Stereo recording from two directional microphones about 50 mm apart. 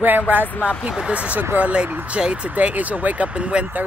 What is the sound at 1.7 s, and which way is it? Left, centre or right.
Speech, right.